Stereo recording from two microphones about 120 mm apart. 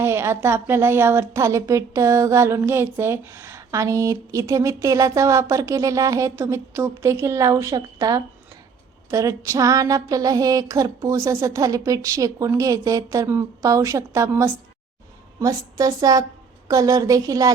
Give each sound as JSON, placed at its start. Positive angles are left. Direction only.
{"t": 0.0, "sound": "a woman's voice", "side_deg": -20}